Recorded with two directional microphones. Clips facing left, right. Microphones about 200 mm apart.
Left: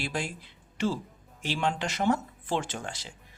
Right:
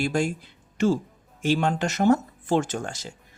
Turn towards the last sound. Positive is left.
turn(degrees=-45)  # may be behind; listen again after turning